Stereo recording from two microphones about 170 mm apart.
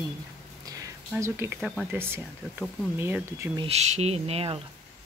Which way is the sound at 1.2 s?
15° right (ahead or behind).